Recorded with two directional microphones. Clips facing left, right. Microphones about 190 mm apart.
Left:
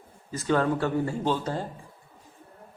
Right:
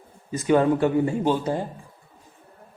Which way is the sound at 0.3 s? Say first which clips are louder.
Right 5 dB; 15° right (ahead or behind).